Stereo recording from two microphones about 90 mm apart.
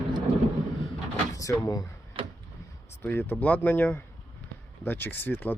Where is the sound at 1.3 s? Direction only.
40° left (ahead or behind).